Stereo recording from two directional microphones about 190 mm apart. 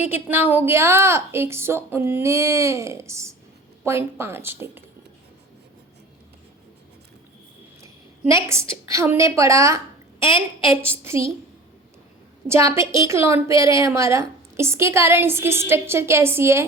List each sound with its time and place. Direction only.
0.0 s a woman's voice: 10° right (ahead or behind)
7.8 s a woman's voice: 15° right (ahead or behind)
10.2 s a woman's voice: 25° left (ahead or behind)
10.8 s a woman's voice: 15° right (ahead or behind)
12.5 s a woman's voice: 15° right (ahead or behind)